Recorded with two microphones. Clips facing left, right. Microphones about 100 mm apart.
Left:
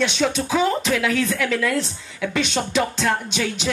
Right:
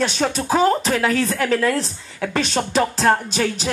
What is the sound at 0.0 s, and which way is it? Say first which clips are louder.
Speech: even; 40° right (ahead or behind).